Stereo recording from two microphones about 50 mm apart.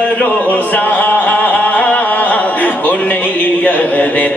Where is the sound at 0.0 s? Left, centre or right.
Left.